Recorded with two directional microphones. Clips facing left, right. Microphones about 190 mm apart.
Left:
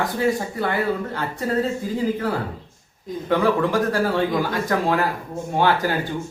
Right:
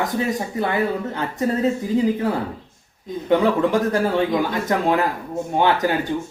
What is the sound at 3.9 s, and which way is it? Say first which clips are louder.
Speech: right 1 dB; 20° right (ahead or behind).